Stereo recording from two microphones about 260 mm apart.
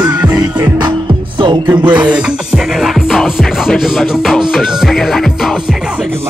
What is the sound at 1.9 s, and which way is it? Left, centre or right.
Music, centre.